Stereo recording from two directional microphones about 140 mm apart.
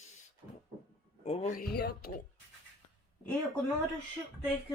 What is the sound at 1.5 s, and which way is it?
Speech, 80° left.